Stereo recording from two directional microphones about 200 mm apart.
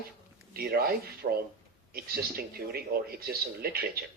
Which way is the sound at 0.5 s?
50° right (ahead or behind).